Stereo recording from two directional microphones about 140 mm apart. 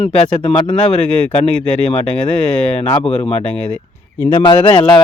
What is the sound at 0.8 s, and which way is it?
Speech, 10° left (ahead or behind).